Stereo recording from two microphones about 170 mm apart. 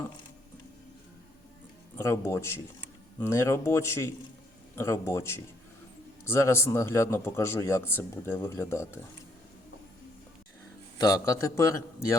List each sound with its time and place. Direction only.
2.0 s a man's voice: 15° left (ahead or behind)
10.9 s a man's voice: 20° left (ahead or behind)